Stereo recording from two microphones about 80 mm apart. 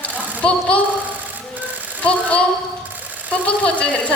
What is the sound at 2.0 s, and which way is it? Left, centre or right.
Speech, centre.